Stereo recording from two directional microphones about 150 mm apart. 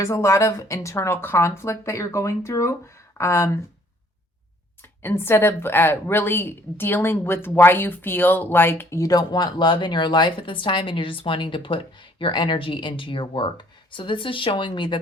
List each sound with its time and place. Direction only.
0.0 s a woman's voice: 20° left (ahead or behind)
4.8 s a woman's voice: 15° left (ahead or behind); by 14.9 s 35° left (ahead or behind)